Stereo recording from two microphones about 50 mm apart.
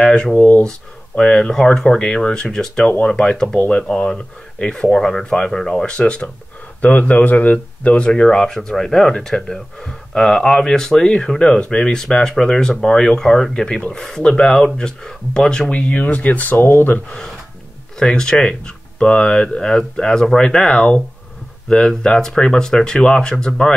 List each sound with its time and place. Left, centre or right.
0.0 s speech: centre
0.4 s speech: left
0.7 s speech: centre
6.8 s speech: left
14.0 s speech: centre
15.7 s speech: left
16.5 s speech: left
17.9 s speech: centre